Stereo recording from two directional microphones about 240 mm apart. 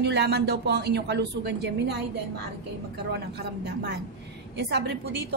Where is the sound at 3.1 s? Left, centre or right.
Right.